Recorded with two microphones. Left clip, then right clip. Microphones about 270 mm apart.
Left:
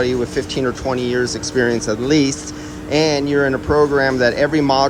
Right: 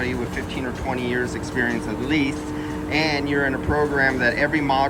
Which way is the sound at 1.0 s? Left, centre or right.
Centre.